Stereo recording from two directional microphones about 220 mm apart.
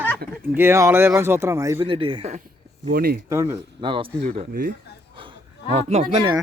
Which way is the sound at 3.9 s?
25° right (ahead or behind).